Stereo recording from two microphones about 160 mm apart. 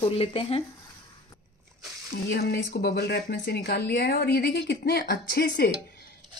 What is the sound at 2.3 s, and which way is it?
Speech, 90° left.